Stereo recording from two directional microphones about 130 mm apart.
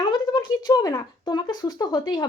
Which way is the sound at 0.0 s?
35° left (ahead or behind).